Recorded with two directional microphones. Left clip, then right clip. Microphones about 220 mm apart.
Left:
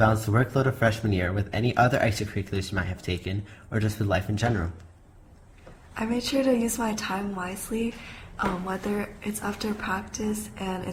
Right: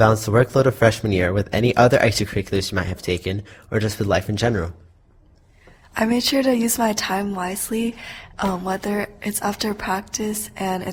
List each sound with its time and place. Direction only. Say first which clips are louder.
0.0 s speech: right 7 dB; 40° right (ahead or behind)
5.9 s a woman's voice: right 8 dB; 40° right (ahead or behind)